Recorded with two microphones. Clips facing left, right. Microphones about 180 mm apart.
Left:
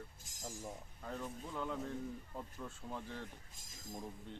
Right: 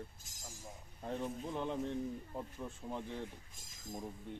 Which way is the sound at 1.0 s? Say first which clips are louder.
Right 6 dB; 25° right (ahead or behind).